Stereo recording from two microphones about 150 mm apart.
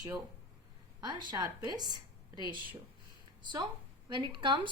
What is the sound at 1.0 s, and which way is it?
A woman's voice, 30° right (ahead or behind).